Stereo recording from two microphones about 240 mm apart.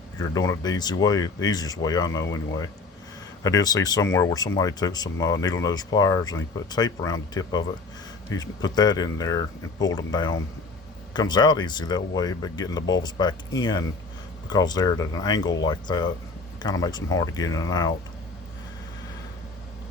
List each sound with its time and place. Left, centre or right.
0.2 s speech: centre
3.4 s speech: centre